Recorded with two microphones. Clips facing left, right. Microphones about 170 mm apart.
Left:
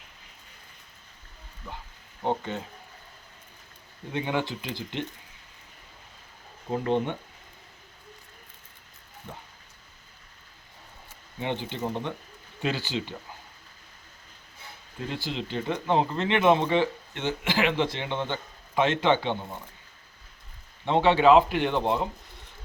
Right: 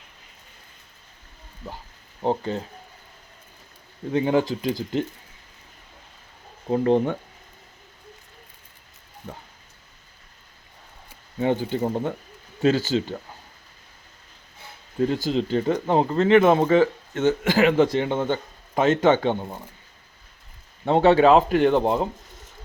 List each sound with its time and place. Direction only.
2.2 s speech: 35° right (ahead or behind)
4.1 s speech: 40° right (ahead or behind)
6.8 s speech: 40° right (ahead or behind)
11.3 s speech: 45° right (ahead or behind)
15.1 s speech: 40° right (ahead or behind)
20.8 s speech: 40° right (ahead or behind)